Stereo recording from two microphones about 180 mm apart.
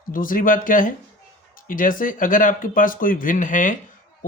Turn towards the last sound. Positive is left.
turn(degrees=45)  # may be behind; listen again after turning